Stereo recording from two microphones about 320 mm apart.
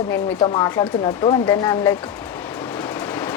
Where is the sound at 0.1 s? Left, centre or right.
Centre.